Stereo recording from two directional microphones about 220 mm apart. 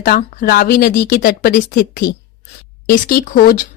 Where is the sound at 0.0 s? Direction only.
45° left (ahead or behind).